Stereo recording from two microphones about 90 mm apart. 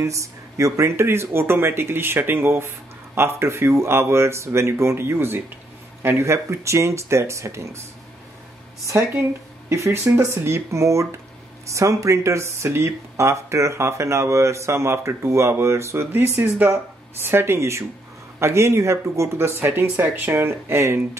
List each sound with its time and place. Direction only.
0.0 s speech: 35° right (ahead or behind)
9.7 s speech: 30° right (ahead or behind)